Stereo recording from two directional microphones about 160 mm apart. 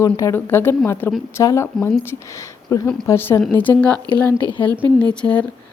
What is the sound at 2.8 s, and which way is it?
Speech, 5° left (ahead or behind).